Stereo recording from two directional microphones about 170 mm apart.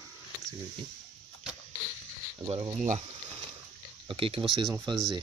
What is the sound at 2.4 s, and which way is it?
Speech, 20° right (ahead or behind).